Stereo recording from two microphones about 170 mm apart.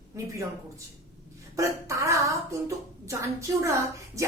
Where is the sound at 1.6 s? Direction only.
20° right (ahead or behind).